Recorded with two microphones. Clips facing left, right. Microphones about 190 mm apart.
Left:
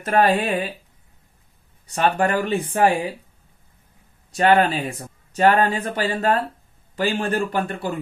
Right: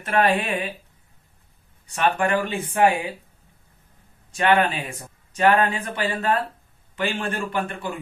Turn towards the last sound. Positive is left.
turn(degrees=40)  # may be behind; listen again after turning